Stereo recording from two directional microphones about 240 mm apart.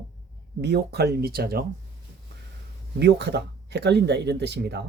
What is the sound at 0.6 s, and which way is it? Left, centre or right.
Speech, right.